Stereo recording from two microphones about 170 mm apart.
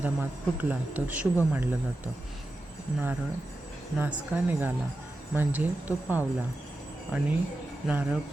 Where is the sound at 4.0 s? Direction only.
10° right (ahead or behind).